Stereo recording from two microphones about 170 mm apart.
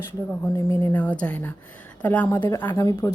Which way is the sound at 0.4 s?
10° left (ahead or behind).